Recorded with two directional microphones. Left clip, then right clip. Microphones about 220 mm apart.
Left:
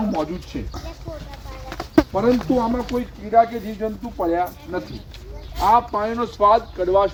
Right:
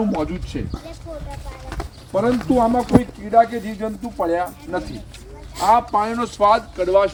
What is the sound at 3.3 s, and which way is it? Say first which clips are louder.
Speech: right 1 dB; 50° right (ahead or behind).